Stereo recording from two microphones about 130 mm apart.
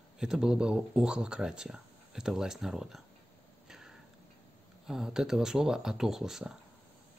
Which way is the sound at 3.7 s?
5° right (ahead or behind).